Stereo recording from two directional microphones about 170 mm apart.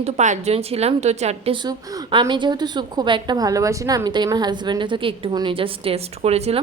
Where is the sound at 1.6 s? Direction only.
25° right (ahead or behind).